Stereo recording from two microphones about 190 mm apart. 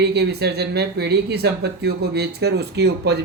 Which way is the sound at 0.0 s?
60° right (ahead or behind).